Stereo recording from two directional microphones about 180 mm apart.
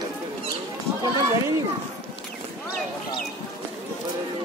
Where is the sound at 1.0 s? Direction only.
15° right (ahead or behind).